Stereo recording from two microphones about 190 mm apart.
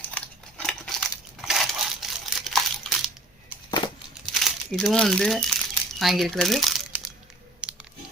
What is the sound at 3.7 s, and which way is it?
Crumpling, 25° left (ahead or behind).